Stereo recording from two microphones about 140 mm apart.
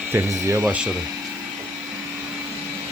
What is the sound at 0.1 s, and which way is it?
Speech, 15° right (ahead or behind).